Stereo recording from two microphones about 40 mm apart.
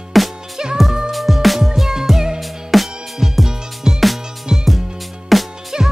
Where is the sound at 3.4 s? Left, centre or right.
Centre.